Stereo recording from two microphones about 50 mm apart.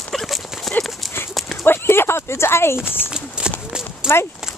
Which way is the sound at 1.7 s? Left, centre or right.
Left.